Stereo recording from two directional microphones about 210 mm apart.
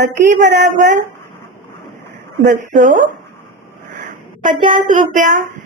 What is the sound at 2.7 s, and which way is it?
Speech, 35° right (ahead or behind).